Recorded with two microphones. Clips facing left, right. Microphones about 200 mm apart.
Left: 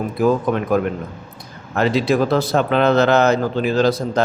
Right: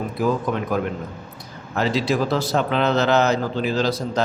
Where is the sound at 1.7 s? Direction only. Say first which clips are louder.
Left 4 dB; 55° left (ahead or behind).